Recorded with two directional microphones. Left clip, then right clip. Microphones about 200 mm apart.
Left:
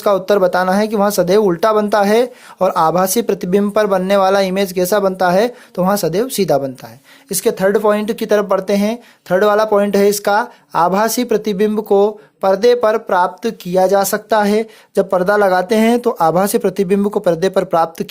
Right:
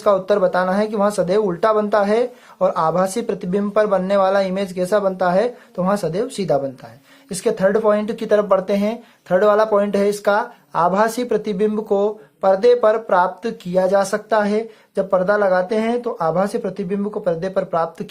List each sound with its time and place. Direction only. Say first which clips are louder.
0.0 s speech: left 3 dB; 40° left (ahead or behind)